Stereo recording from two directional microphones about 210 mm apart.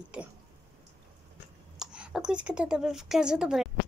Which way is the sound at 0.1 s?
5° right (ahead or behind).